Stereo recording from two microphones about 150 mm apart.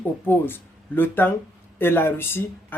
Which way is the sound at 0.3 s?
15° left (ahead or behind).